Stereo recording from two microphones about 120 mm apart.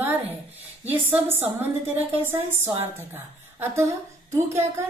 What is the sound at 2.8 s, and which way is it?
A woman's voice, 20° right (ahead or behind).